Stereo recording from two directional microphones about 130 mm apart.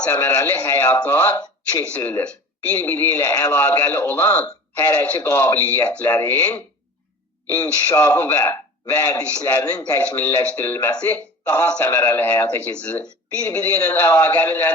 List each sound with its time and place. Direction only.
0.0 s a man's voice: 20° left (ahead or behind)